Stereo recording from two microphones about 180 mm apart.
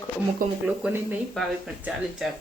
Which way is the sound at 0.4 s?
50° right (ahead or behind).